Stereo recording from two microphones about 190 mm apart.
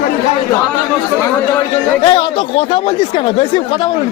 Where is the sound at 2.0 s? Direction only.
25° left (ahead or behind).